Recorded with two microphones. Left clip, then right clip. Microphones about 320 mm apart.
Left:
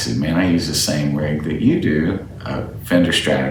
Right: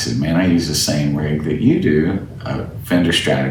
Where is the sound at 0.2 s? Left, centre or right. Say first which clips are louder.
Right 1 dB; centre.